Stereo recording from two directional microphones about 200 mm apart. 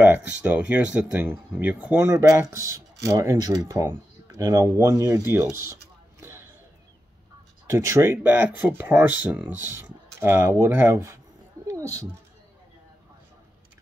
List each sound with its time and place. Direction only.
0.0 s speech: 10° right (ahead or behind)
7.7 s speech: 10° right (ahead or behind)
11.6 s cat: 15° right (ahead or behind)